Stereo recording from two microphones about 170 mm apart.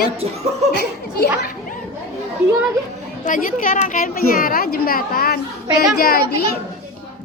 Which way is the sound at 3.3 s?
55° left (ahead or behind).